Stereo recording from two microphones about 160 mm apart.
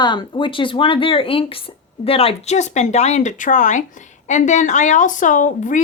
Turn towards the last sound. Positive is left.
turn(degrees=50)  # may be behind; listen again after turning